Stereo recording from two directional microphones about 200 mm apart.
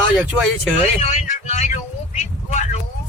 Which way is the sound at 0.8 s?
35° left (ahead or behind).